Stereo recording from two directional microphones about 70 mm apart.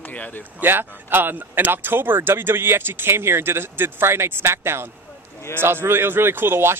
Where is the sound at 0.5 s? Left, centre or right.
Right.